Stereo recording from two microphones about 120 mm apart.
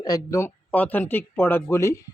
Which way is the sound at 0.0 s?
30° left (ahead or behind).